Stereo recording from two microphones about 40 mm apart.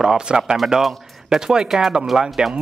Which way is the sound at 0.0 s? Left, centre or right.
Centre.